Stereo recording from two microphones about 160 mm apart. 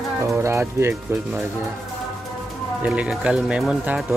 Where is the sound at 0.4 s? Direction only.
15° right (ahead or behind).